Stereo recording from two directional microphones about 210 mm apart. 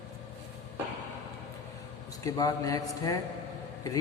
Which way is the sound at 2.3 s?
15° left (ahead or behind).